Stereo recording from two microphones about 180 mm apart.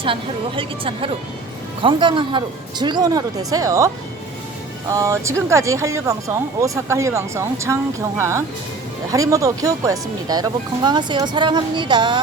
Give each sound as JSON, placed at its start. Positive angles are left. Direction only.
{"t": 0.0, "sound": "speech", "side_deg": -30}